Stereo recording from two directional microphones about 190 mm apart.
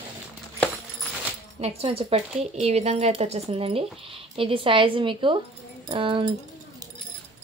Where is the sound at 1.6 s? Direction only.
30° right (ahead or behind).